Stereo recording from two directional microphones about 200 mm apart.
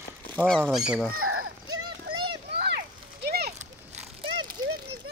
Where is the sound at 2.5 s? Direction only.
55° right (ahead or behind).